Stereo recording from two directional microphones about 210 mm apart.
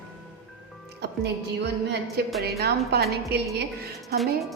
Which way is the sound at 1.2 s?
55° right (ahead or behind).